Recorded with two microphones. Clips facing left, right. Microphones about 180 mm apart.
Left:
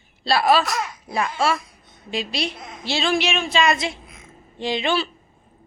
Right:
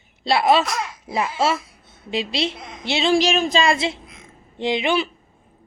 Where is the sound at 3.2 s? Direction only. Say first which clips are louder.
Right 3 dB; 35° right (ahead or behind); by 5.1 s 15° right (ahead or behind).